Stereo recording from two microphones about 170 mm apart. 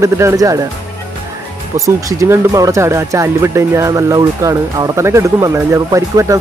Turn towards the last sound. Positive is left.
turn(degrees=-20)  # may be behind; listen again after turning